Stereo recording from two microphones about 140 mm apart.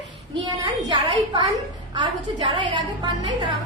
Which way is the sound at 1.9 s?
35° right (ahead or behind).